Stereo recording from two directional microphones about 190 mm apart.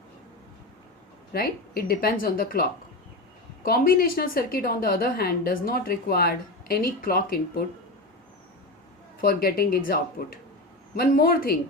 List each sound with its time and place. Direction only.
1.3 s a woman's voice: 55° left (ahead or behind)
9.2 s a woman's voice: 50° left (ahead or behind)